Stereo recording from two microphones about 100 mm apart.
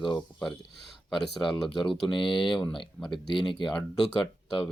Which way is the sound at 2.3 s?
50° left (ahead or behind).